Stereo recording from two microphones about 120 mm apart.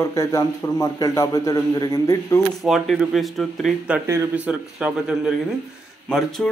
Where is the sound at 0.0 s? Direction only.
25° left (ahead or behind).